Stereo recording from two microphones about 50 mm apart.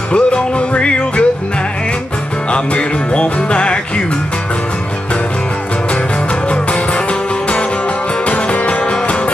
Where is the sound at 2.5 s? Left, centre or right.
Left.